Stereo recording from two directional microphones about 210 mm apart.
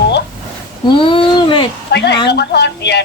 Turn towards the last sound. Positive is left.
turn(degrees=55)  # may be behind; listen again after turning